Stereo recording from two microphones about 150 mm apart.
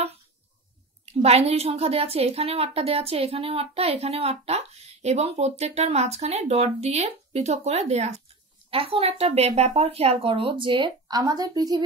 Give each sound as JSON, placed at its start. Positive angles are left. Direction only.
{"t": 1.0, "sound": "a woman's voice", "side_deg": -45}